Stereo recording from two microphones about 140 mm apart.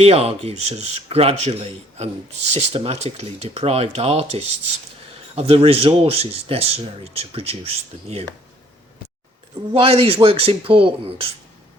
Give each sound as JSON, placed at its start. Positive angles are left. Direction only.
{"t": 0.0, "sound": "speech", "side_deg": -45}
{"t": 9.7, "sound": "speech", "side_deg": -40}